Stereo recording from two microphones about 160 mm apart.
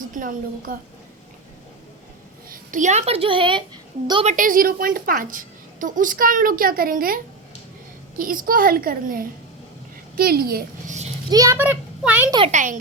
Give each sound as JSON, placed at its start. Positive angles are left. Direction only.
{"t": 0.1, "sound": "a woman's voice", "side_deg": -60}
{"t": 2.5, "sound": "a child's voice", "side_deg": -50}
{"t": 4.3, "sound": "a woman's voice", "side_deg": -55}
{"t": 8.2, "sound": "a woman's voice", "side_deg": -60}
{"t": 11.3, "sound": "a woman's voice", "side_deg": -25}
{"t": 11.5, "sound": "a woman's voice", "side_deg": -10}
{"t": 12.5, "sound": "speech", "side_deg": -50}